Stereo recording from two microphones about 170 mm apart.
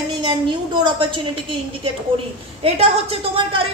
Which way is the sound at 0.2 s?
30° right (ahead or behind).